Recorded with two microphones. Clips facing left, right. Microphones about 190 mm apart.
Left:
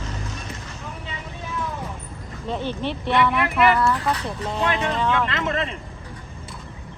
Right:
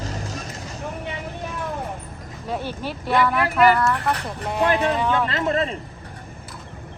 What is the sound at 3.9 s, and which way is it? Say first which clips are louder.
Speech: even; 60° right (ahead or behind).